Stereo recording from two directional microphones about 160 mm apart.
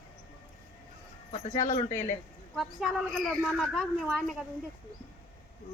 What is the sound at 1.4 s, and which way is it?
Speech, 45° left (ahead or behind).